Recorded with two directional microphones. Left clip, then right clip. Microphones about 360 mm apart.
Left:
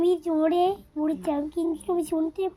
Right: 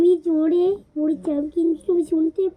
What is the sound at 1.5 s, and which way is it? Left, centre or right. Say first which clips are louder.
Speech: right 7 dB; left.